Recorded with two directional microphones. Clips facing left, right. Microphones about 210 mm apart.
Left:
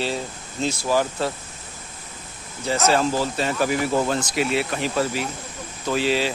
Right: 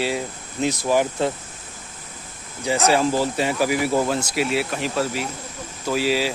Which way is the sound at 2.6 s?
15° right (ahead or behind).